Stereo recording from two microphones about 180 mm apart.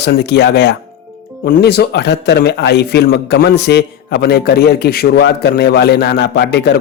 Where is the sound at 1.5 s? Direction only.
65° left (ahead or behind).